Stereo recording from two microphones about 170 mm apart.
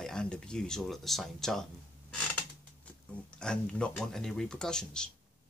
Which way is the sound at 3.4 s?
5° left (ahead or behind).